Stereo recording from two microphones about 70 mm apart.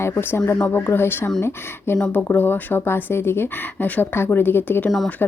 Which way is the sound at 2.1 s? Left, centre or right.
Left.